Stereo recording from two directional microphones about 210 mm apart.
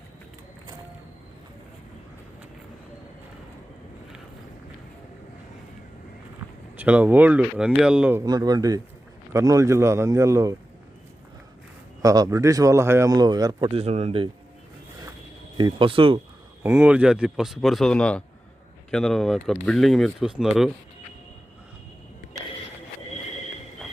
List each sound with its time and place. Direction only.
6.7 s speech: 5° right (ahead or behind)
8.2 s speech: 20° right (ahead or behind)
12.0 s speech: 15° right (ahead or behind)
15.5 s speech: 20° right (ahead or behind)
16.6 s speech: 10° right (ahead or behind)